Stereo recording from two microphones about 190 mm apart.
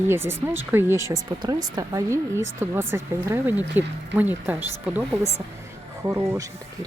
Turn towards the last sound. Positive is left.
turn(degrees=-20)  # may be behind; listen again after turning